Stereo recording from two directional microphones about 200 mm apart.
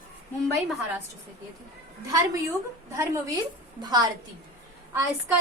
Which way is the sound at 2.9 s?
15° right (ahead or behind).